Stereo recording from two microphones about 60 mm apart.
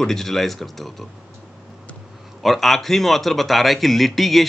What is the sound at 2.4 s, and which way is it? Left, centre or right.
Speech, centre.